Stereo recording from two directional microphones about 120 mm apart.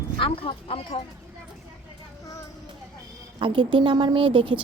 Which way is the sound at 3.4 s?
45° right (ahead or behind).